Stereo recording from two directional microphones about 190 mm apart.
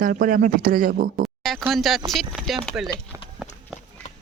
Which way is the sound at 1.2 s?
Centre (ahead or behind).